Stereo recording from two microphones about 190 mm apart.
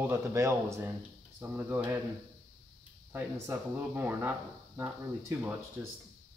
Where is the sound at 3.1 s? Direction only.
10° right (ahead or behind).